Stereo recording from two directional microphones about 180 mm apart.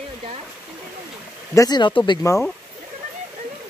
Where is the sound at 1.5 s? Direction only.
20° left (ahead or behind).